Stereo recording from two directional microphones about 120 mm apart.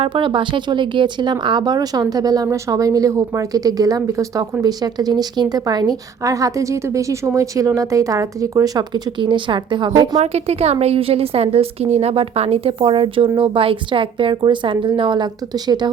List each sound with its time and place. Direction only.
0.0 s a woman's voice: 45° right (ahead or behind)
10.2 s a woman's voice: 60° right (ahead or behind); by 15.9 s 35° right (ahead or behind)